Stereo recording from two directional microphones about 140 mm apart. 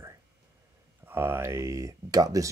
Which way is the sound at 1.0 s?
15° right (ahead or behind).